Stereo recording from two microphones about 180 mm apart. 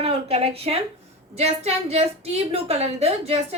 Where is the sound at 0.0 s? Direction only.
35° right (ahead or behind).